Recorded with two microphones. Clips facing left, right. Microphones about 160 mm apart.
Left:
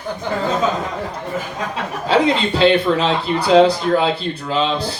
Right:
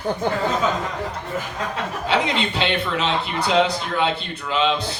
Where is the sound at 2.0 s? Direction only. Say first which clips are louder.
Left 6 dB; 35° left (ahead or behind).